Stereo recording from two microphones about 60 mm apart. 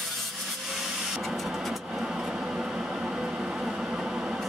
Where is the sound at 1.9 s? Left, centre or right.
Centre.